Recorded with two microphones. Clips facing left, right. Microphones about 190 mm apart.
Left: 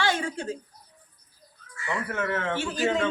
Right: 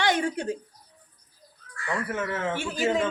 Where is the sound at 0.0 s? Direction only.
20° right (ahead or behind).